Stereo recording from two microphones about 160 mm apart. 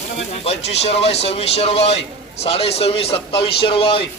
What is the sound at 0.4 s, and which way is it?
A man's voice, 40° left (ahead or behind).